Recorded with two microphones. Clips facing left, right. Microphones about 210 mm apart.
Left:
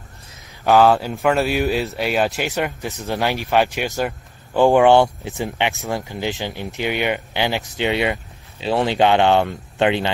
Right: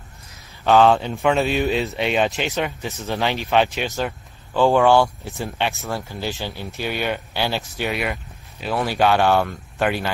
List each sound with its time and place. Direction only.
0.7 s speech: 5° left (ahead or behind)
2.5 s speech: 15° left (ahead or behind)